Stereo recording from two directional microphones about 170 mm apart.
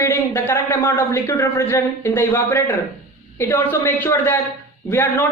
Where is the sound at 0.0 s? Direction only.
15° left (ahead or behind).